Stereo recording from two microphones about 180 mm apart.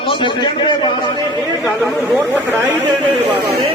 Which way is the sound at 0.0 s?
25° left (ahead or behind).